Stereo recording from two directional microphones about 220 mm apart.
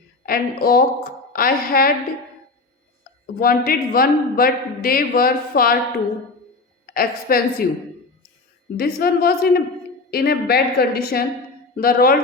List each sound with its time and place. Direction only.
0.3 s a man's voice: 40° left (ahead or behind)
3.4 s a man's voice: 40° left (ahead or behind)
6.8 s a man's voice: 40° left (ahead or behind)
8.7 s a woman's voice: 40° left (ahead or behind)